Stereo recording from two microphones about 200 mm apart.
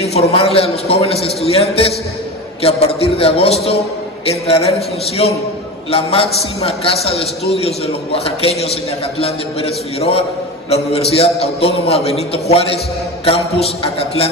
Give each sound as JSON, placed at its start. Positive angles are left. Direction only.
{"t": 0.0, "sound": "a man's voice", "side_deg": 30}